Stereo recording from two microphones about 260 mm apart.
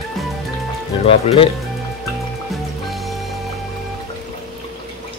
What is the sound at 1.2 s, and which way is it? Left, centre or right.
Speech, left.